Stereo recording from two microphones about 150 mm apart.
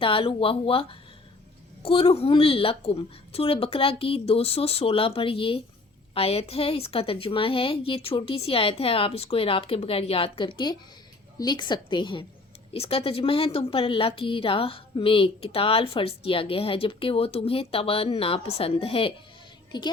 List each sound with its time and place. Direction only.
0.0 s a woman's voice: 35° left (ahead or behind)
12.7 s a woman's voice: 40° left (ahead or behind)